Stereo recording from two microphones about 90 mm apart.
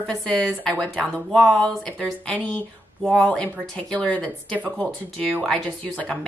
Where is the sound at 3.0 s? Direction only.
5° left (ahead or behind).